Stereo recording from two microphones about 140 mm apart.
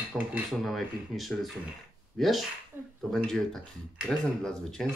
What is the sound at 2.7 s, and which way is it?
Speech, 15° right (ahead or behind).